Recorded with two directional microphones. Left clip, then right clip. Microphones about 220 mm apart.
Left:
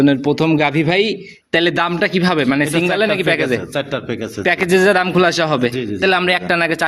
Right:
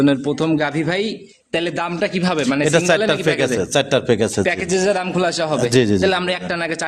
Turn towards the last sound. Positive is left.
turn(degrees=15)  # may be behind; listen again after turning